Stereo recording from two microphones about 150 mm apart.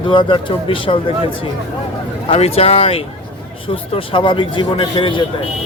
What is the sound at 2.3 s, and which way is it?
Speech, 40° left (ahead or behind).